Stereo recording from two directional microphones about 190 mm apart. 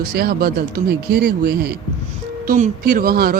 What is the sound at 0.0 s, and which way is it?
Speech, 55° right (ahead or behind).